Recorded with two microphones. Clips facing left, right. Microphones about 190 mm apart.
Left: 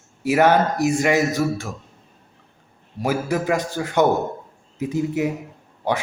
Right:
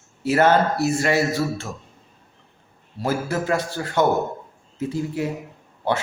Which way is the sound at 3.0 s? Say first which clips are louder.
Left 2 dB; 15° left (ahead or behind).